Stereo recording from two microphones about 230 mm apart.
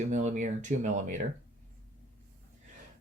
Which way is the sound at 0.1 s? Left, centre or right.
Right.